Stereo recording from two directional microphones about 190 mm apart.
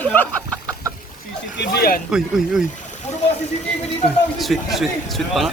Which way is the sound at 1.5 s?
60° left (ahead or behind).